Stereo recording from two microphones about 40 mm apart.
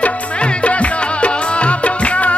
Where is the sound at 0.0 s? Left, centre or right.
Left.